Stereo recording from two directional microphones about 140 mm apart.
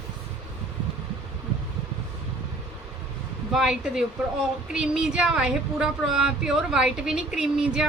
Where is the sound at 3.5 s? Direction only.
5° right (ahead or behind).